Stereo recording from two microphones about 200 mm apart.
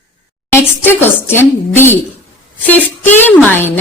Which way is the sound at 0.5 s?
10° left (ahead or behind).